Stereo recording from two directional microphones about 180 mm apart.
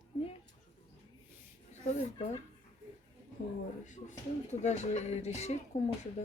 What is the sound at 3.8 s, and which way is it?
Speech, 45° left (ahead or behind).